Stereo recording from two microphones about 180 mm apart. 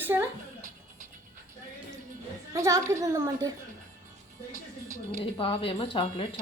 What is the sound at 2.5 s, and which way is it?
A woman's voice, 15° right (ahead or behind).